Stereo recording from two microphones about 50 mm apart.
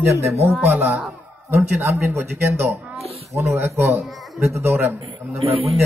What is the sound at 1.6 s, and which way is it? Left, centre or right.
A man's voice, right.